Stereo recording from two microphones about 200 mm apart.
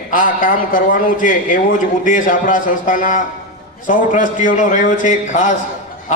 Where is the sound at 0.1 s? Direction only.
40° left (ahead or behind).